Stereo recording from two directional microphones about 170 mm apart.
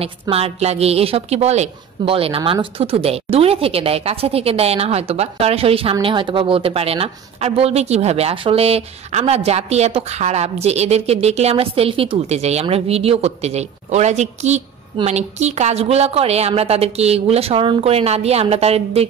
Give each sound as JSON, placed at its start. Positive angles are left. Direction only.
{"t": 0.0, "sound": "a woman's voice", "side_deg": -35}